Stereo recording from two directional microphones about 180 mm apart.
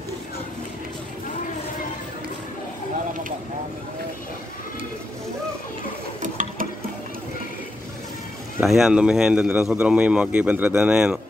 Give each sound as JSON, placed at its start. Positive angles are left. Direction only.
{"t": 6.2, "sound": "sewing machine", "side_deg": -45}
{"t": 8.5, "sound": "speech", "side_deg": 0}